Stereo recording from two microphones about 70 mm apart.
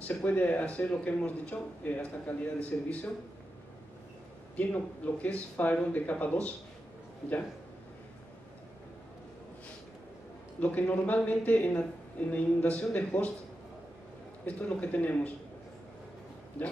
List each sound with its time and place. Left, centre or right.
0.0 s a man's voice: left
4.6 s a man's voice: left
10.6 s a man's voice: left
14.4 s a man's voice: left